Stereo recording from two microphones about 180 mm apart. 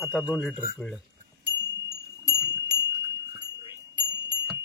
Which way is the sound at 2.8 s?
20° right (ahead or behind).